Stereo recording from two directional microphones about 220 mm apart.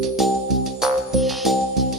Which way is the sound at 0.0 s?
Centre (ahead or behind).